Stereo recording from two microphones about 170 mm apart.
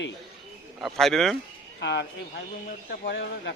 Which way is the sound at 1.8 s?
90° left.